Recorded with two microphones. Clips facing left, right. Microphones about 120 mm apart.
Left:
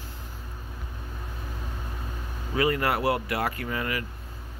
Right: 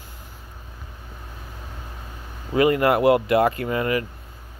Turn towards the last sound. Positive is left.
turn(degrees=-25)  # may be behind; listen again after turning